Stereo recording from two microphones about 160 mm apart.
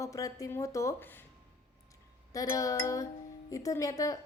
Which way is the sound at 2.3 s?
20° left (ahead or behind).